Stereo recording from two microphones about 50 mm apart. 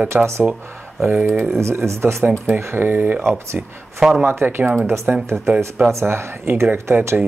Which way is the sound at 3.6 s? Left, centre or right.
Centre.